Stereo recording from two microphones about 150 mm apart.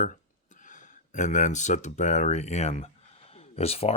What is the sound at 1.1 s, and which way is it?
Speech, 55° left (ahead or behind).